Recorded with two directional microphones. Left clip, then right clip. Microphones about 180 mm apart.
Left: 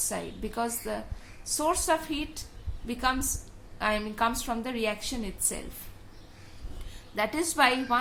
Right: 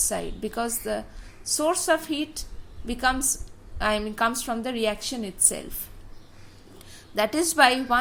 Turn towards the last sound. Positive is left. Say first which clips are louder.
# right 5 dB
turn(degrees=-35)  # may be behind; listen again after turning